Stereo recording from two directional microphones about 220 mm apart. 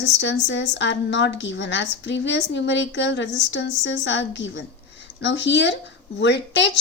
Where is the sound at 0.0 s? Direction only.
55° left (ahead or behind).